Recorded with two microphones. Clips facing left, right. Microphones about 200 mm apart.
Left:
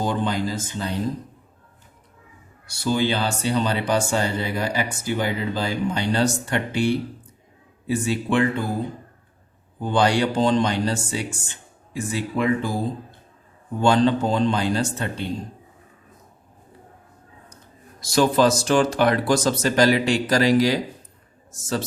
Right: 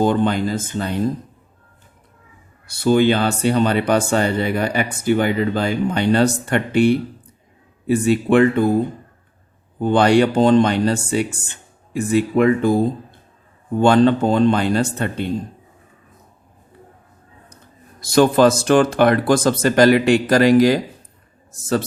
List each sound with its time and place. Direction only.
0.0 s speech: 55° right (ahead or behind)
2.6 s speech: 55° right (ahead or behind)
9.8 s speech: 60° right (ahead or behind)
18.0 s speech: 55° right (ahead or behind)